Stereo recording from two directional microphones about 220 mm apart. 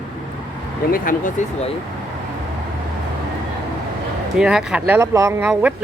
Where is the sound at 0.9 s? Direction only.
35° left (ahead or behind).